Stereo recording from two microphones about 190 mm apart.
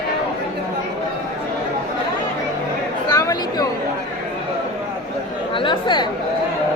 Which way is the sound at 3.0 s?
20° left (ahead or behind).